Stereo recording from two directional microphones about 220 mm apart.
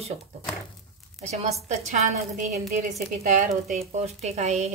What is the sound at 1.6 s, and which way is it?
A woman's voice, 30° right (ahead or behind).